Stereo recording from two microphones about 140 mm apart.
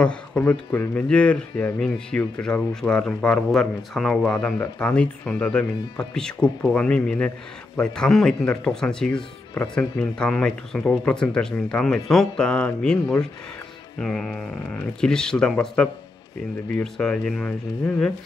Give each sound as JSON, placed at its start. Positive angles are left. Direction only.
{"t": 0.0, "sound": "speech", "side_deg": 5}